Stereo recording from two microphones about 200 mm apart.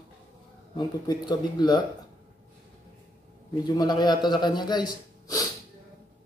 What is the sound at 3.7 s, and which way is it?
Speech, 20° left (ahead or behind).